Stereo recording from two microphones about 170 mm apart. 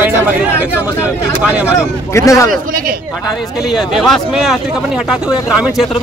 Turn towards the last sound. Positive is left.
turn(degrees=-5)  # may be behind; listen again after turning